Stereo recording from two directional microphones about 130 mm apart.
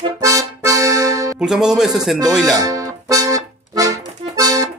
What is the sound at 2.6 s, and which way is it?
Music, 25° right (ahead or behind).